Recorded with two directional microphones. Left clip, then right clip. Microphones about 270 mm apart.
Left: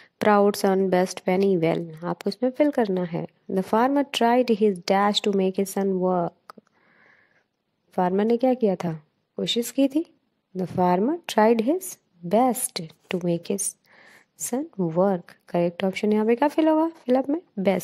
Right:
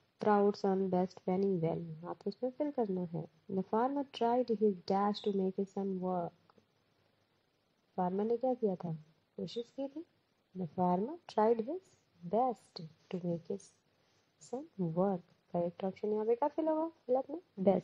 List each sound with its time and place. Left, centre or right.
0.2 s a woman's voice: left
7.9 s a woman's voice: left